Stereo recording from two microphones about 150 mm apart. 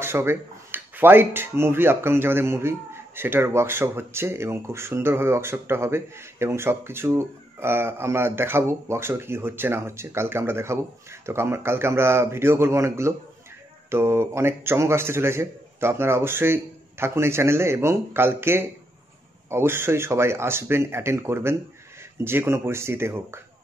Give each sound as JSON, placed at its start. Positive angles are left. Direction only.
{"t": 0.0, "sound": "speech", "side_deg": -15}